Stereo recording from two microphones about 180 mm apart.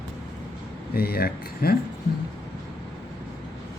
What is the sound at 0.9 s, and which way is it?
Speech, 55° left (ahead or behind).